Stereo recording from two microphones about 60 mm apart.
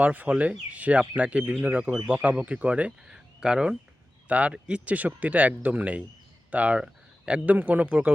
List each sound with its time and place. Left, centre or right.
0.0 s speech: right